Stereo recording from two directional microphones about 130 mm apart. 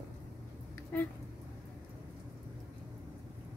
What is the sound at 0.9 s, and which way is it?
Speech, 10° left (ahead or behind).